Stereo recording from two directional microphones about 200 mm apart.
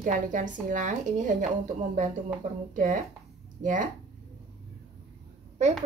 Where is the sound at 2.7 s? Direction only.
40° right (ahead or behind).